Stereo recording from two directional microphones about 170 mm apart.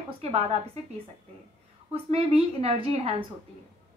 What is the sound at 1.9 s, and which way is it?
A woman's voice, 35° right (ahead or behind).